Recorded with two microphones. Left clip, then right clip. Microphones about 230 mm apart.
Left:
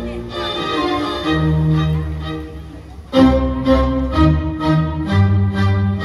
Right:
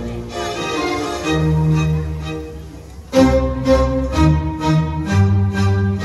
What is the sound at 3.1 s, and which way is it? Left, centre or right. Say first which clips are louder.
Music: even; right.